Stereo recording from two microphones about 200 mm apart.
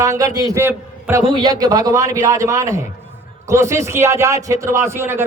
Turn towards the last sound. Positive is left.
turn(degrees=-10)  # may be behind; listen again after turning